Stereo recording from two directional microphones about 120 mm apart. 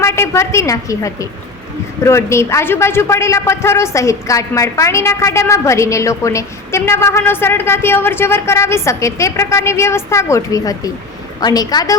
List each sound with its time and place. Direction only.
0.0 s a woman's voice: 25° left (ahead or behind)